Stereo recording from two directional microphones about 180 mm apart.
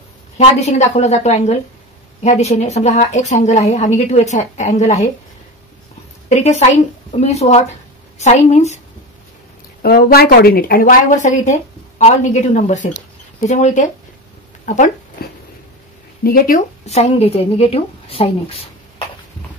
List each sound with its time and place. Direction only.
0.4 s a woman's voice: 40° left (ahead or behind)
6.2 s a woman's voice: 40° left (ahead or behind)
9.8 s a woman's voice: 60° left (ahead or behind); by 13.8 s 40° left (ahead or behind)
16.3 s speech: 50° left (ahead or behind)
16.8 s a woman's voice: 35° left (ahead or behind)